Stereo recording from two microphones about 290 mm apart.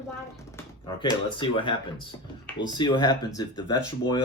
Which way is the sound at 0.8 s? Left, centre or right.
Centre.